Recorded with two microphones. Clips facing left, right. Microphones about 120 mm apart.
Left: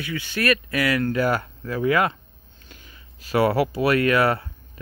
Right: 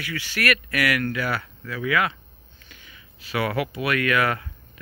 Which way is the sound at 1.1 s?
40° left (ahead or behind).